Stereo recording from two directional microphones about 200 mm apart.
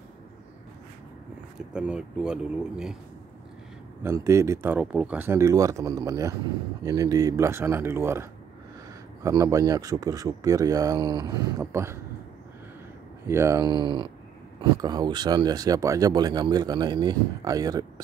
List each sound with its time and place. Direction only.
1.6 s speech: 5° right (ahead or behind)
4.0 s speech: 15° right (ahead or behind)
13.3 s speech: 15° right (ahead or behind)